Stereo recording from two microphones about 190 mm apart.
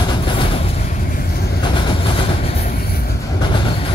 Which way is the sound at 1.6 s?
25° left (ahead or behind).